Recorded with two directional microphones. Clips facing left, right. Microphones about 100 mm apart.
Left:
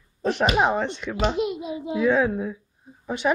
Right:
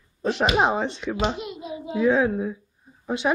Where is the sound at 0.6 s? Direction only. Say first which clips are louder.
Even; 5° right (ahead or behind).